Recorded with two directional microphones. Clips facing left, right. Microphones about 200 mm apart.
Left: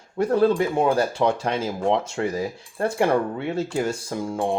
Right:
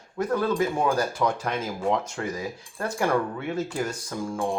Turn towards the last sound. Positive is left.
turn(degrees=25)  # may be behind; listen again after turning